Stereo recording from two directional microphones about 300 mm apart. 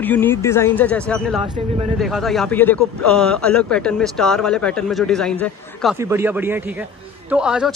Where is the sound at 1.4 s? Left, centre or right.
Centre.